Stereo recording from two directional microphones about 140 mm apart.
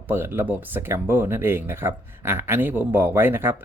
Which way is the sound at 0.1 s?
15° right (ahead or behind).